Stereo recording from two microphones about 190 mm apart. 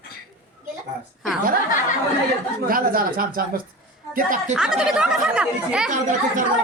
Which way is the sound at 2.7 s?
50° right (ahead or behind).